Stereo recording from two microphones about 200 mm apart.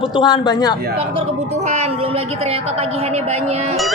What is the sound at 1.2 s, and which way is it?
A woman's voice, 35° right (ahead or behind).